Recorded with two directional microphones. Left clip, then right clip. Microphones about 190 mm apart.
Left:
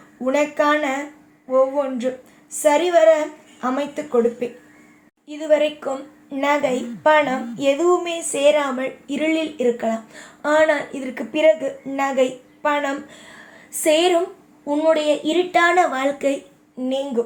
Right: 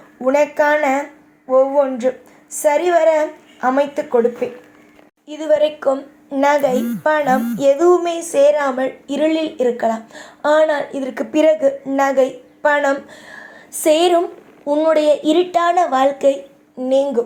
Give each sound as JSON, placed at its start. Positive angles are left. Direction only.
{"t": 0.3, "sound": "speech", "side_deg": -25}